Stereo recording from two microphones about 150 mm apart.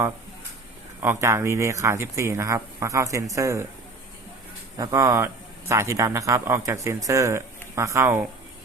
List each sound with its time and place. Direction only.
1.0 s a man's voice: 15° right (ahead or behind)
4.8 s a man's voice: 20° right (ahead or behind)